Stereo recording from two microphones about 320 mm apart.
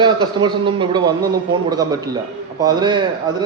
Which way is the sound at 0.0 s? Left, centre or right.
Centre.